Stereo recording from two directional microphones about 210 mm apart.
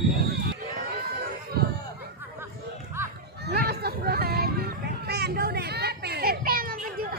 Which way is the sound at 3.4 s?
50° right (ahead or behind).